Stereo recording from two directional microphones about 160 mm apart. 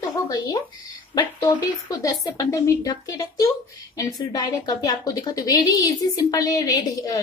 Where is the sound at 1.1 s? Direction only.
20° left (ahead or behind).